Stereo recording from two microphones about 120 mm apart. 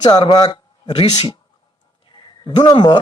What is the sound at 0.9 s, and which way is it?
Speech, 55° left (ahead or behind).